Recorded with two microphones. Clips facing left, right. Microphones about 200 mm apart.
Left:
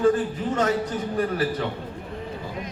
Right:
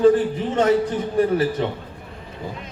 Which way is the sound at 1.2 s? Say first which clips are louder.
Right 6 dB; 25° right (ahead or behind).